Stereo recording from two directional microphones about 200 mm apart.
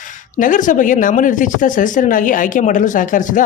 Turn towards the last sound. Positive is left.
turn(degrees=40)  # may be behind; listen again after turning